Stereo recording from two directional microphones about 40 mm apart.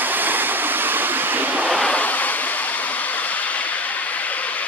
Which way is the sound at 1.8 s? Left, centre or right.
Left.